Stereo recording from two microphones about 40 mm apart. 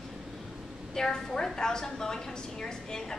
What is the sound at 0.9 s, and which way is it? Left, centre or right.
A woman's voice, centre.